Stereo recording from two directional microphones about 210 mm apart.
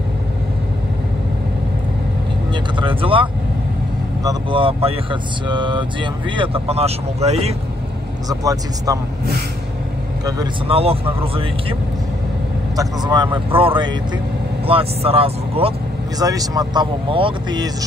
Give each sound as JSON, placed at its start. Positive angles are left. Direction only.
{"t": 2.5, "sound": "vehicle", "side_deg": -25}
{"t": 4.2, "sound": "speech", "side_deg": -20}
{"t": 8.3, "sound": "speech", "side_deg": -15}
{"t": 10.2, "sound": "speech", "side_deg": -25}
{"t": 12.7, "sound": "speech", "side_deg": -20}
{"t": 16.2, "sound": "speech", "side_deg": -15}